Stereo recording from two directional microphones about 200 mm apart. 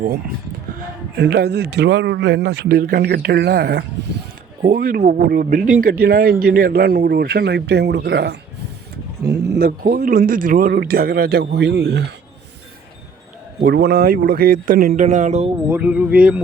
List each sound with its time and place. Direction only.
1.1 s speech: 60° right (ahead or behind)
9.5 s speech: 50° right (ahead or behind)
13.6 s speech: 55° right (ahead or behind)
15.0 s speech: 35° right (ahead or behind)
15.7 s speech: 5° right (ahead or behind)